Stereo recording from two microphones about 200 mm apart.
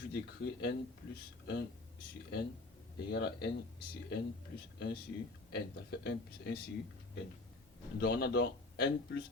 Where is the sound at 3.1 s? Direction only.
55° left (ahead or behind).